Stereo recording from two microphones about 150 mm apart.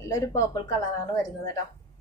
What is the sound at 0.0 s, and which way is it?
Speech, 20° left (ahead or behind).